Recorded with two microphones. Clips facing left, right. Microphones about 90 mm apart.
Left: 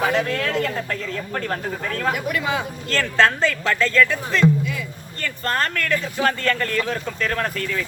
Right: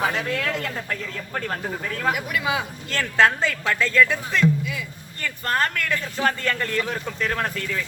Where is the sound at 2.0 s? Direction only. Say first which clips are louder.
Left 1 dB; 5° right (ahead or behind).